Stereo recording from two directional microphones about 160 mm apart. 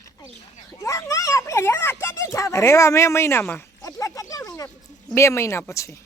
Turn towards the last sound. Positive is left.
turn(degrees=20)  # may be behind; listen again after turning